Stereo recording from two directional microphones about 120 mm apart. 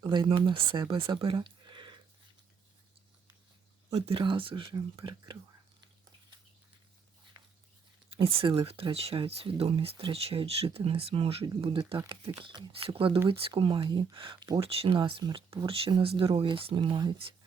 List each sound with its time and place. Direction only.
0.0 s speech: 40° right (ahead or behind)
1.5 s a sound: 40° right (ahead or behind)
3.9 s speech: 50° right (ahead or behind)
7.3 s a sound: 30° right (ahead or behind)
8.1 s speech: 50° right (ahead or behind)
14.6 s speech: 50° right (ahead or behind)